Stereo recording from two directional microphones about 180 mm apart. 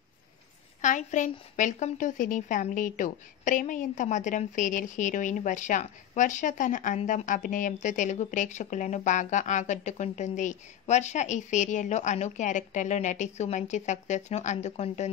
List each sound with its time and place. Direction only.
0.7 s a woman's voice: 45° left (ahead or behind)